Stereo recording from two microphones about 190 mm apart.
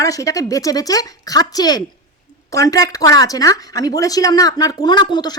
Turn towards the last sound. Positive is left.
turn(degrees=20)  # may be behind; listen again after turning